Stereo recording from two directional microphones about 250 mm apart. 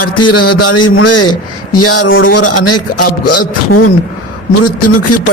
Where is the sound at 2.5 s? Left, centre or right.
Left.